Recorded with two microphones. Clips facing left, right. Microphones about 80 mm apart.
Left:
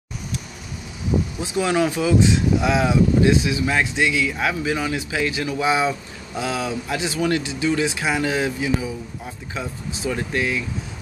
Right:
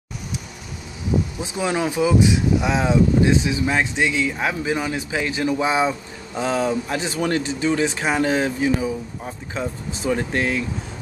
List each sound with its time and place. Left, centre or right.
1.4 s speech: centre; by 10.6 s right